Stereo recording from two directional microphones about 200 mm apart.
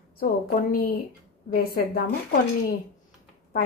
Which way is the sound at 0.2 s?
45° left (ahead or behind).